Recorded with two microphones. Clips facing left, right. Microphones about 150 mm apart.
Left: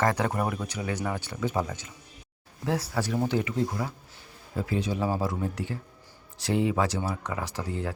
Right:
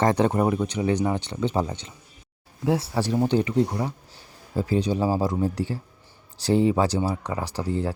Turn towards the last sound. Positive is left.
turn(degrees=-30)  # may be behind; listen again after turning